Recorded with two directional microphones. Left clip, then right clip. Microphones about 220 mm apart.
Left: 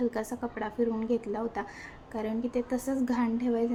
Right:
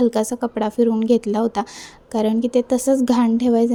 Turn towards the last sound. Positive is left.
turn(degrees=-40)  # may be behind; listen again after turning